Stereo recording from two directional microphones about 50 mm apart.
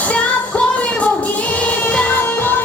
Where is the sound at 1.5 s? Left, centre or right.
Left.